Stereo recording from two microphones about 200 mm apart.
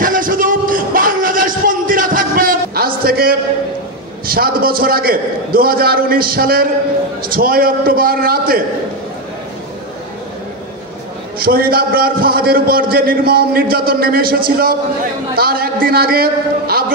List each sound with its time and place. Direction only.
0.0 s music: 45° right (ahead or behind)
4.3 s a man's voice: 45° right (ahead or behind)
11.3 s a man's voice: 45° right (ahead or behind)